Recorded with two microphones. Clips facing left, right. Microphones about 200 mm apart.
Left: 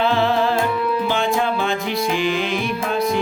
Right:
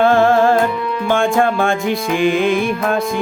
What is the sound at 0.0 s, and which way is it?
Music, 50° right (ahead or behind).